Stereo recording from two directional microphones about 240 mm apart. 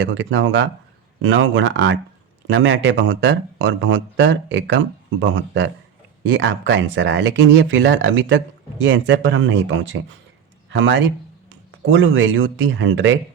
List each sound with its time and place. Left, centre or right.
0.0 s speech: right